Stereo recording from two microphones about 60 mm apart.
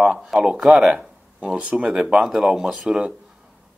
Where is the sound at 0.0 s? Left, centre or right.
Centre.